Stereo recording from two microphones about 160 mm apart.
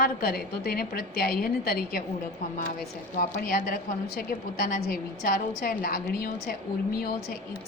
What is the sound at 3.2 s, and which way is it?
A woman's voice, 65° left (ahead or behind).